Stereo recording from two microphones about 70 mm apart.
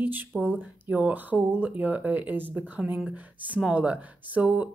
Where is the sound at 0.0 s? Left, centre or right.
Right.